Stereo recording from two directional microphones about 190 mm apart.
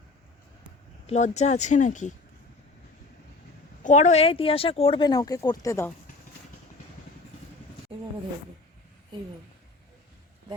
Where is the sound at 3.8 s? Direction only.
40° left (ahead or behind); by 5.9 s 15° left (ahead or behind).